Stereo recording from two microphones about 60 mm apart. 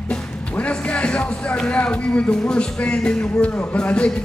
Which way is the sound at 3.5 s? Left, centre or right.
Left.